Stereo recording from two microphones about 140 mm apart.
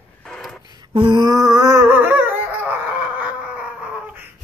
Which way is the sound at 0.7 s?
30° right (ahead or behind).